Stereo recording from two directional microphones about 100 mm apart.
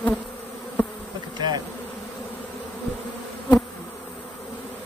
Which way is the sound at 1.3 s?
45° right (ahead or behind).